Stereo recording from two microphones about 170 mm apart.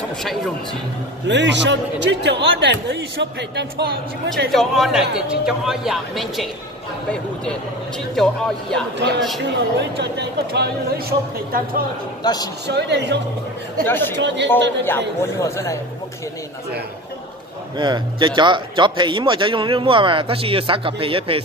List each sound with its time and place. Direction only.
1.2 s a man's voice: 90° right
4.5 s speech: centre (ahead or behind)
9.0 s a man's voice: 90° right; by 11.8 s 60° right (ahead or behind)
12.2 s speech: 25° left (ahead or behind)
12.6 s a man's voice: 85° right
13.8 s a man's voice: 10° left (ahead or behind)
14.1 s a man's voice: 90° right
14.9 s a man's voice: 15° left (ahead or behind)
17.7 s a man's voice: 25° right (ahead or behind)